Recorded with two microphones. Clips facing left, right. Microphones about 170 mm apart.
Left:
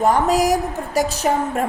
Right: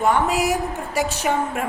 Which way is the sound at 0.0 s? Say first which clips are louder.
Left 3 dB; 40° left (ahead or behind).